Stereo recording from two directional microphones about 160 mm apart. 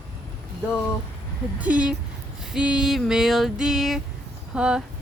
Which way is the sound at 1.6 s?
10° right (ahead or behind).